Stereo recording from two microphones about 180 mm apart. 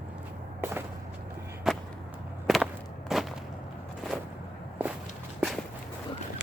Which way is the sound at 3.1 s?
Centre (ahead or behind).